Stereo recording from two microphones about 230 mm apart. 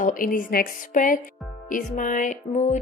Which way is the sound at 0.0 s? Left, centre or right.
Left.